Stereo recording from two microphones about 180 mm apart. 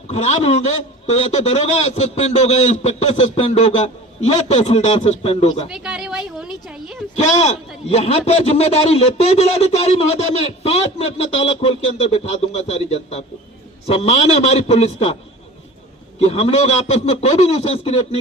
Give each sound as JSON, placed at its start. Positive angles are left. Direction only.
{"t": 0.1, "sound": "speech", "side_deg": 40}
{"t": 5.7, "sound": "speech", "side_deg": -5}
{"t": 7.2, "sound": "speech", "side_deg": 40}
{"t": 16.2, "sound": "speech", "side_deg": 35}